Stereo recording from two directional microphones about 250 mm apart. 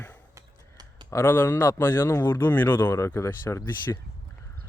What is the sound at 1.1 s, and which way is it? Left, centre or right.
Speech, centre.